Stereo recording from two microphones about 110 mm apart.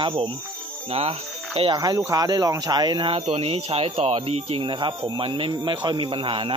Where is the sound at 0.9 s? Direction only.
65° right (ahead or behind).